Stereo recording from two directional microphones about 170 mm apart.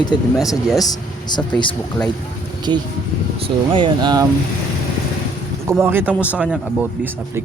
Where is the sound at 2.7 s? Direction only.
25° right (ahead or behind).